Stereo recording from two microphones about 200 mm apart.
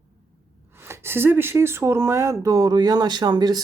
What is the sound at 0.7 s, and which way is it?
Speech, 15° right (ahead or behind).